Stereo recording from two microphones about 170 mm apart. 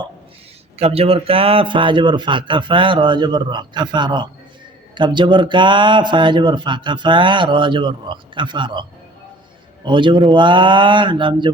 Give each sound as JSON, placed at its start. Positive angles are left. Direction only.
{"t": 0.8, "sound": "speech", "side_deg": -35}